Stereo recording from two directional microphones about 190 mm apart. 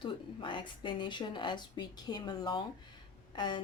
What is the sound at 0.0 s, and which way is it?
Speech, 25° left (ahead or behind).